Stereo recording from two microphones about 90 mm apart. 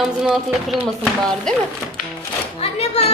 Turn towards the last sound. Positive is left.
turn(degrees=90)